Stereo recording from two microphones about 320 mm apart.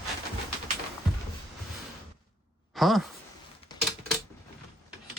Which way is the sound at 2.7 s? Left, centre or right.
Centre.